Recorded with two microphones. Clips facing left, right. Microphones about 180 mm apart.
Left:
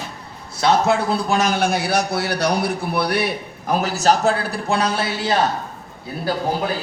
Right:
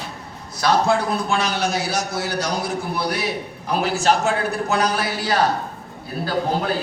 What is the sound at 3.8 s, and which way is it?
A man's voice, 40° left (ahead or behind).